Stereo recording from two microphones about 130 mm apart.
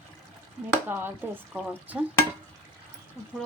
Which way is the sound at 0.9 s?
15° right (ahead or behind).